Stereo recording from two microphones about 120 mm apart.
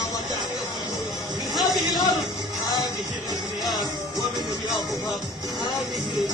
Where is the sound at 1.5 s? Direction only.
35° left (ahead or behind).